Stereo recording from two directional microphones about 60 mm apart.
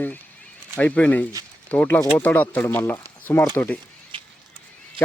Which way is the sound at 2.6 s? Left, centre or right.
Left.